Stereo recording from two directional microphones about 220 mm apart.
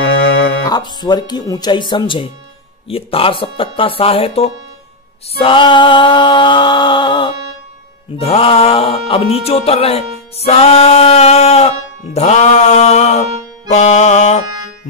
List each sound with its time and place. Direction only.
0.7 s speech: 20° left (ahead or behind)